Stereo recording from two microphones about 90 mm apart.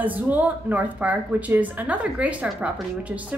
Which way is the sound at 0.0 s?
20° right (ahead or behind).